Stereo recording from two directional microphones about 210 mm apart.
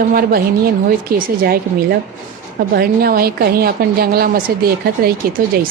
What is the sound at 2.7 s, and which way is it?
A woman's voice, 45° right (ahead or behind).